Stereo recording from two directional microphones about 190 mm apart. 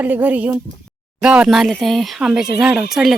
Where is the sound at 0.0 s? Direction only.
10° right (ahead or behind).